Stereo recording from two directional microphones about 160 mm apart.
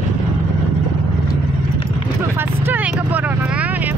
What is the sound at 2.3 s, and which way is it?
Vehicle, 15° right (ahead or behind).